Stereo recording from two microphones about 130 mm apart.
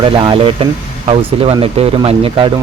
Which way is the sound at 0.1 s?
40° right (ahead or behind).